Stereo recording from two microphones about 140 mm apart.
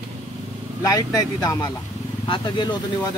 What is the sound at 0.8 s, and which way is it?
Speech, 25° left (ahead or behind).